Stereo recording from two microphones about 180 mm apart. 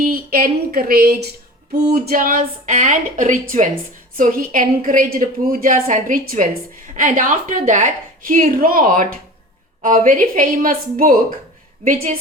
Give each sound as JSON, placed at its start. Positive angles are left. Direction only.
{"t": 0.0, "sound": "a woman's voice", "side_deg": -55}